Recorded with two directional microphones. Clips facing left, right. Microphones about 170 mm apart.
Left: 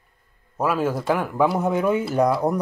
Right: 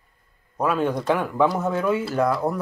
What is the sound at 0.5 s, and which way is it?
Speech, 5° left (ahead or behind).